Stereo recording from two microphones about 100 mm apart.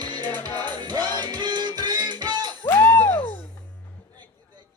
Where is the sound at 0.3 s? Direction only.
20° left (ahead or behind).